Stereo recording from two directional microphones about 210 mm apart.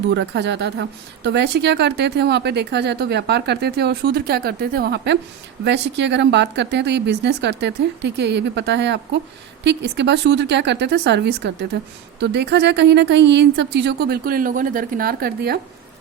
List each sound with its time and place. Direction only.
0.1 s a woman's voice: 55° right (ahead or behind)